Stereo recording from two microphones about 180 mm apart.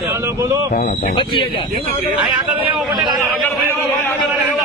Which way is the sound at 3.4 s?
15° left (ahead or behind).